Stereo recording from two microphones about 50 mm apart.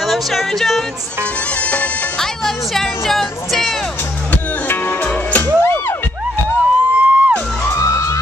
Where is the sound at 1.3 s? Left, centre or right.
Left.